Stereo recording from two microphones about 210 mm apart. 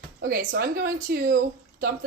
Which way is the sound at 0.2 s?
45° right (ahead or behind).